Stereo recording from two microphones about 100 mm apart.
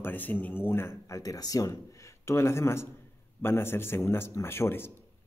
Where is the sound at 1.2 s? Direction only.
35° left (ahead or behind).